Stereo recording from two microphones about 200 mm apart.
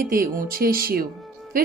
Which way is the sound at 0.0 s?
45° right (ahead or behind).